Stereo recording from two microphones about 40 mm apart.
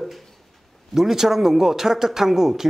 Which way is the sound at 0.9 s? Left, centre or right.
Centre.